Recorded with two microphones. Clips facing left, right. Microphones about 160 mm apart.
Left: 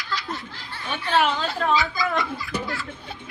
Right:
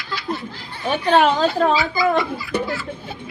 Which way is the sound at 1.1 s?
40° right (ahead or behind).